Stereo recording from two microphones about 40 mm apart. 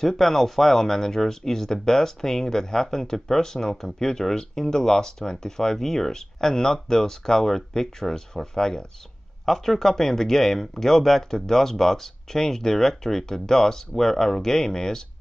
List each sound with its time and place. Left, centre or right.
0.0 s speech: centre
9.5 s speech: centre